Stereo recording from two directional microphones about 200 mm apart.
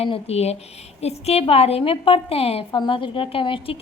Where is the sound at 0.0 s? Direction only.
30° left (ahead or behind).